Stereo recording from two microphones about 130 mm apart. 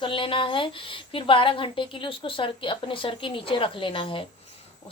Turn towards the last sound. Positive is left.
turn(degrees=40)  # may be behind; listen again after turning